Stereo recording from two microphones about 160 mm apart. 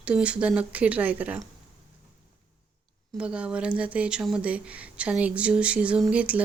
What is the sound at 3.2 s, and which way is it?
Speech, 5° right (ahead or behind).